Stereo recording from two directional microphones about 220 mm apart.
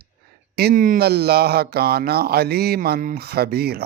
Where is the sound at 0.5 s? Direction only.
45° right (ahead or behind).